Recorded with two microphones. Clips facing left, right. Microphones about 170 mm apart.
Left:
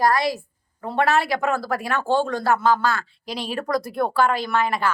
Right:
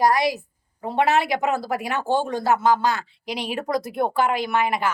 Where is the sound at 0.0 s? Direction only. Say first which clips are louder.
Right 1 dB; 15° right (ahead or behind).